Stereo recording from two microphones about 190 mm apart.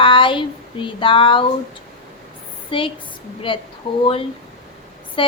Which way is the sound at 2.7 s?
25° left (ahead or behind).